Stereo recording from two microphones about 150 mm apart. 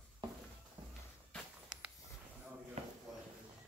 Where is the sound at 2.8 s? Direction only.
45° right (ahead or behind).